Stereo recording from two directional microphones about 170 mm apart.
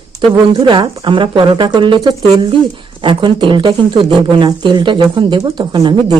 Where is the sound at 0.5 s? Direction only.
25° right (ahead or behind).